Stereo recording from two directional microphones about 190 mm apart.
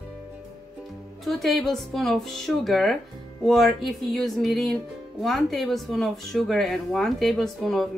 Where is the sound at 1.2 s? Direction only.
Centre (ahead or behind).